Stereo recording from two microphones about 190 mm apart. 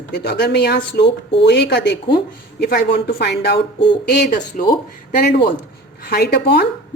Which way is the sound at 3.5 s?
25° left (ahead or behind).